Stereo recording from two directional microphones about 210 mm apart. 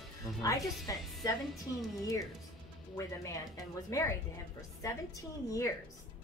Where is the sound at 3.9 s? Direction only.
15° left (ahead or behind).